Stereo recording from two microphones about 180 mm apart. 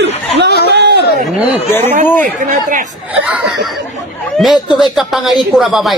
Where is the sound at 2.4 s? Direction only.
45° right (ahead or behind).